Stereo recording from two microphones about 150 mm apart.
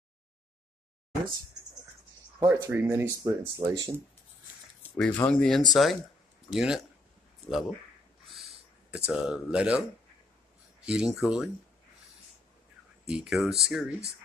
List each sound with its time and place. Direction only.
2.4 s speech: 15° right (ahead or behind)
4.8 s speech: 10° left (ahead or behind)
8.3 s a sound: centre (ahead or behind)
10.9 s speech: 5° right (ahead or behind)
13.1 s speech: centre (ahead or behind)